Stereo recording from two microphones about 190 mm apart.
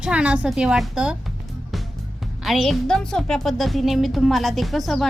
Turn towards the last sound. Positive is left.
turn(degrees=0)  # may be behind; listen again after turning